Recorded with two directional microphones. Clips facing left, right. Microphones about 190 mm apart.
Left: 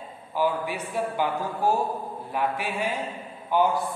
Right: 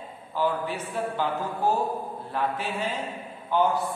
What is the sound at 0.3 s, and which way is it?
A man's voice, 10° left (ahead or behind).